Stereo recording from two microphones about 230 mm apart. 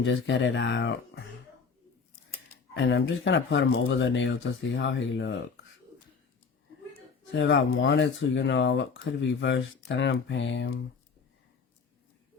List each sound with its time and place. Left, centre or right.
0.0 s speech: left
2.7 s speech: left
7.3 s speech: left